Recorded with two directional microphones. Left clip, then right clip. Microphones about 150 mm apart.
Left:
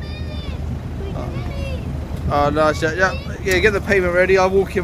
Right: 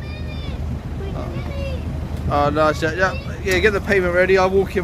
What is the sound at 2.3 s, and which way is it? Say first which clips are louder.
Speech: left 1 dB; centre (ahead or behind).